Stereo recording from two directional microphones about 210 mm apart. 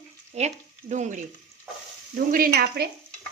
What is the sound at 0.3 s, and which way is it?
Speech, 35° right (ahead or behind).